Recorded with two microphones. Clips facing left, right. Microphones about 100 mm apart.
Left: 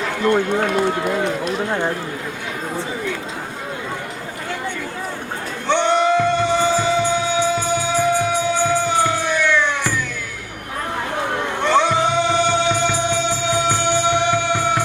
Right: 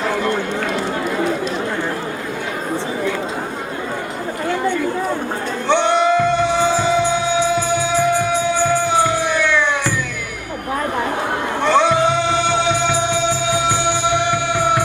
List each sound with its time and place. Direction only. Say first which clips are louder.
5.6 s music: right 1 dB; 15° right (ahead or behind)
11.6 s music: right 2 dB; 15° right (ahead or behind)
12.5 s music: right 1 dB; 55° right (ahead or behind)
12.7 s music: right 1 dB; 50° left (ahead or behind)
14.3 s music: right 1 dB; 15° right (ahead or behind)